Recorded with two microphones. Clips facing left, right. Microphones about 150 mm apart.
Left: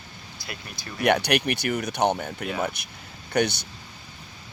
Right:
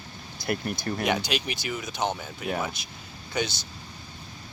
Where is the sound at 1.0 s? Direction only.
65° left (ahead or behind).